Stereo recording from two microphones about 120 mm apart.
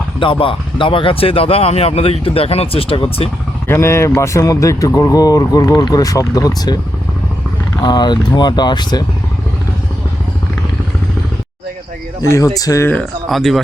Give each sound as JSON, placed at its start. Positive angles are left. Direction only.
{"t": 0.2, "sound": "speech", "side_deg": 45}
{"t": 3.7, "sound": "speech", "side_deg": 20}
{"t": 7.8, "sound": "speech", "side_deg": 35}
{"t": 12.2, "sound": "speech", "side_deg": 25}
{"t": 12.9, "sound": "speech", "side_deg": 5}